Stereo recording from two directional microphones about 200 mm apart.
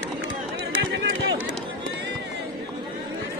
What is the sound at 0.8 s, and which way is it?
Run, 65° right (ahead or behind).